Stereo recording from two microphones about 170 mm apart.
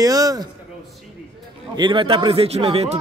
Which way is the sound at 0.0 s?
20° right (ahead or behind).